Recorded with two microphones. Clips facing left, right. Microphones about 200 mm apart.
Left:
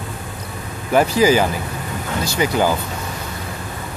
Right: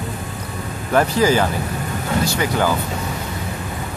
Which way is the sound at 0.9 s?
10° left (ahead or behind).